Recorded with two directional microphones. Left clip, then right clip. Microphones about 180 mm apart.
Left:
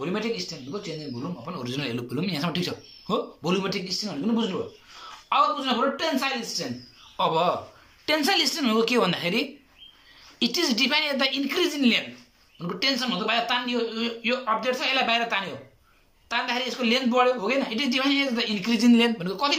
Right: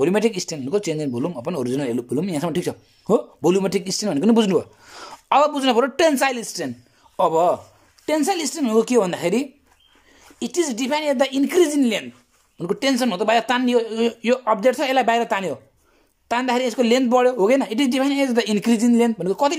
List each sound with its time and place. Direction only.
0.0 s a man's voice: 55° right (ahead or behind)
7.2 s a woman's voice: 40° right (ahead or behind)